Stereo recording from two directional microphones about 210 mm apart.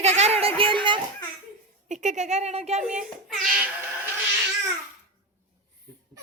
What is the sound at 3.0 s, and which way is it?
Child singing, centre (ahead or behind).